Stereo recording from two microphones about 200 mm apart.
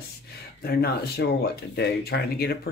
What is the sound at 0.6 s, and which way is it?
Speech, 50° left (ahead or behind).